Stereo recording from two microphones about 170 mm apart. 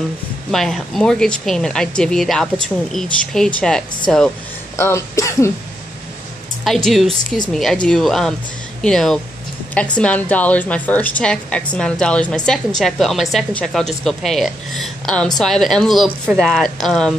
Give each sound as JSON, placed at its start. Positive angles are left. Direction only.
{"t": 0.5, "sound": "a woman's voice", "side_deg": 5}
{"t": 4.7, "sound": "a woman's voice", "side_deg": 15}
{"t": 6.6, "sound": "a woman's voice", "side_deg": 0}